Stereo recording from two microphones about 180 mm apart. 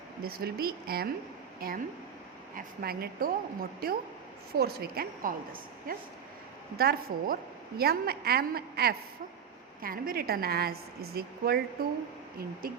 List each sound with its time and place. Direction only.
0.2 s a woman's voice: 55° right (ahead or behind)